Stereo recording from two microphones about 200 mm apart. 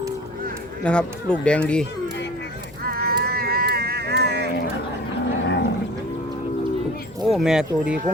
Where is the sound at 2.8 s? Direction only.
50° right (ahead or behind).